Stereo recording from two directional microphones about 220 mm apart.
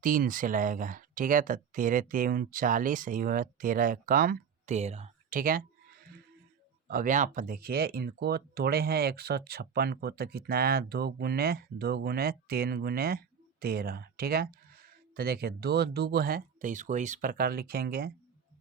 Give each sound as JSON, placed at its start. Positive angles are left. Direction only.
{"t": 0.0, "sound": "speech", "side_deg": -40}